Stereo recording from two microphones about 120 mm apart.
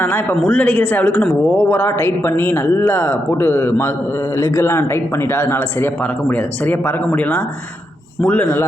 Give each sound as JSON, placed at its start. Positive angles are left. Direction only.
{"t": 0.0, "sound": "speech", "side_deg": 15}